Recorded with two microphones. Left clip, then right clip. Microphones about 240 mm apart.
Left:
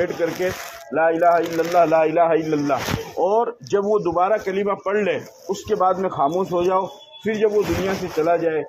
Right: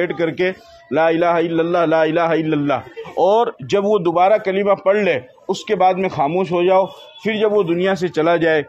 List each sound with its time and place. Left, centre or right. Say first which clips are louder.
0.0 s a man's voice: right 3 dB; right